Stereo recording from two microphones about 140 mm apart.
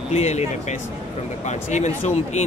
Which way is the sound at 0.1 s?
55° left (ahead or behind).